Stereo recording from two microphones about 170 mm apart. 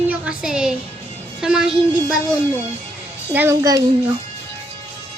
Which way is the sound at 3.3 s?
15° right (ahead or behind).